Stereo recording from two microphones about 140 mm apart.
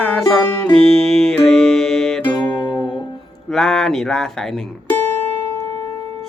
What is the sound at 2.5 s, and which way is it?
Music, 35° left (ahead or behind).